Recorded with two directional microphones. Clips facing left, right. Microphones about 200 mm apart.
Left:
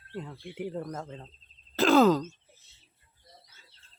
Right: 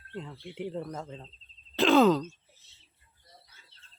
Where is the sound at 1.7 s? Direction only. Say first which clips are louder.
Even; centre (ahead or behind).